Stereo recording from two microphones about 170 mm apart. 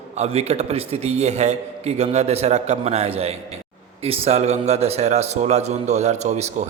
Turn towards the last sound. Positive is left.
turn(degrees=-40)  # may be behind; listen again after turning